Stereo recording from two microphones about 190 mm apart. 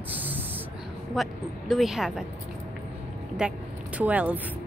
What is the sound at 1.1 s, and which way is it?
Speech, centre (ahead or behind).